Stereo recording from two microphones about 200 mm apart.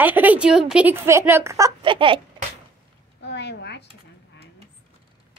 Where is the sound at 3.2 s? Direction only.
60° left (ahead or behind).